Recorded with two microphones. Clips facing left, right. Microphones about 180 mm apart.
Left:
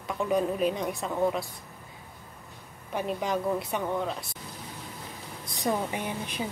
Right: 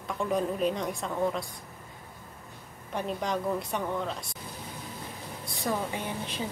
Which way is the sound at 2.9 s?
5° left (ahead or behind).